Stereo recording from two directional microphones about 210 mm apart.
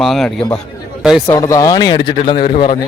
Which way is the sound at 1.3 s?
15° left (ahead or behind).